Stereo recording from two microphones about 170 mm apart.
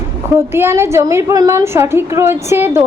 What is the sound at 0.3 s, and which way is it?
A woman's voice, 15° right (ahead or behind).